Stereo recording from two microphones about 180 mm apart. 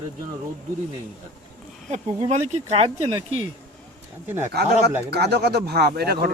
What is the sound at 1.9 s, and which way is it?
Speech, 35° right (ahead or behind).